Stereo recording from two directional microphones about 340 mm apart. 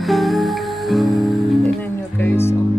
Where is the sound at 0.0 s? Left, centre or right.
Centre.